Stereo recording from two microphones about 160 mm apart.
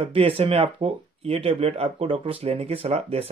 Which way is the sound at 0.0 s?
35° right (ahead or behind).